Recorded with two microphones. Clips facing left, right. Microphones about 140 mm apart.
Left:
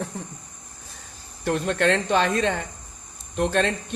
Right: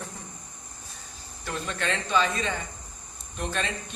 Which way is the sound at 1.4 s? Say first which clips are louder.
Left 9 dB; 60° left (ahead or behind).